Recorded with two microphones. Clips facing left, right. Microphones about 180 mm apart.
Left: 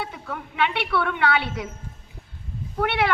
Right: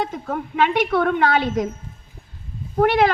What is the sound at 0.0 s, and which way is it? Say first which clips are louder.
A woman's voice: right 7 dB; 40° right (ahead or behind).